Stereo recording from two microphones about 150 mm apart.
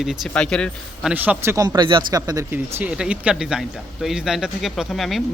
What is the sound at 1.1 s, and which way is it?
Speech, 10° right (ahead or behind).